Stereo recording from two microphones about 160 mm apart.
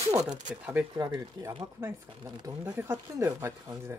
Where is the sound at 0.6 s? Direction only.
10° right (ahead or behind).